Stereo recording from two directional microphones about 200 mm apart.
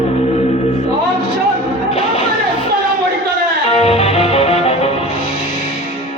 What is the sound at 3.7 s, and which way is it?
Music, 30° left (ahead or behind).